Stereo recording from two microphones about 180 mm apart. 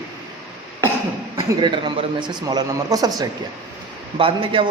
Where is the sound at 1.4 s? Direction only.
25° right (ahead or behind).